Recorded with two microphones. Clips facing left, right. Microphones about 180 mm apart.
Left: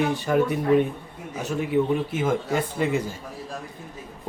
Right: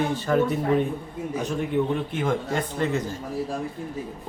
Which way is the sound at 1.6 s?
5° left (ahead or behind).